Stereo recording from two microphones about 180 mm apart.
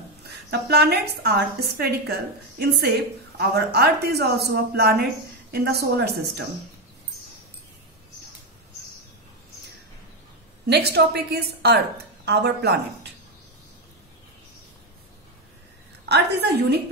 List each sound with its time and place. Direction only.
0.2 s a woman's voice: 65° right (ahead or behind)
10.7 s a woman's voice: 65° right (ahead or behind)
16.1 s a woman's voice: 65° right (ahead or behind)